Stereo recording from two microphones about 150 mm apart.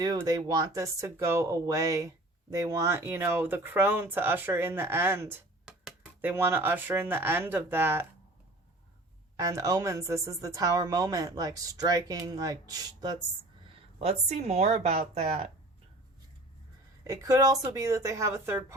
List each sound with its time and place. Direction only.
0.0 s speech: 25° right (ahead or behind)
9.4 s a woman's voice: 20° right (ahead or behind)
14.0 s a woman's voice: 45° right (ahead or behind)
17.0 s a woman's voice: 20° right (ahead or behind)